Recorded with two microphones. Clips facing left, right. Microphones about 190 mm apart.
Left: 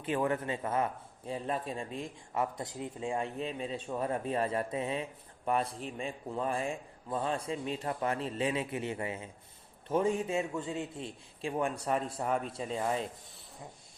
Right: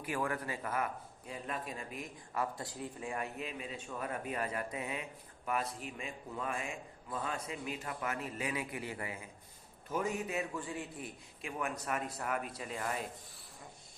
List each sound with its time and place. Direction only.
0.0 s a man's voice: 25° left (ahead or behind)